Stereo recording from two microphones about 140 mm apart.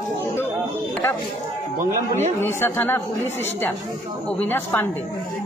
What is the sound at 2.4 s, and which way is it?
Speech, 15° left (ahead or behind).